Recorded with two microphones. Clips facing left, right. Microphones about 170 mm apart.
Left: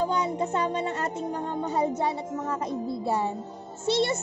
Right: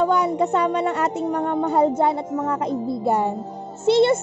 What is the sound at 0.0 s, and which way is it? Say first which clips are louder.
A woman's voice: right 7 dB; 65° right (ahead or behind).